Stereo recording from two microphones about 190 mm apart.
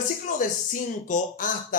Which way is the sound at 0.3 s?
45° left (ahead or behind).